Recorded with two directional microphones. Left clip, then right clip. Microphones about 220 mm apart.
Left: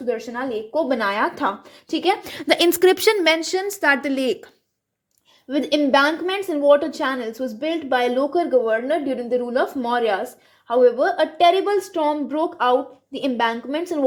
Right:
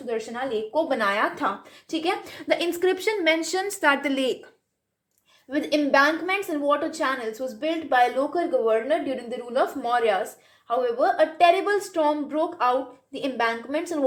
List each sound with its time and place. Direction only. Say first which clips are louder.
0.1 s speech: left 3 dB; 35° left (ahead or behind)
3.4 s a woman's voice: left 3 dB; 25° left (ahead or behind)
5.5 s a woman's voice: left 4 dB; 30° left (ahead or behind)